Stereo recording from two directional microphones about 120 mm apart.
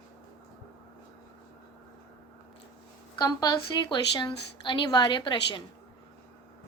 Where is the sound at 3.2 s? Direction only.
35° left (ahead or behind).